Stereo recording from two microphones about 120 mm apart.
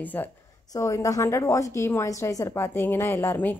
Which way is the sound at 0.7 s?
25° left (ahead or behind).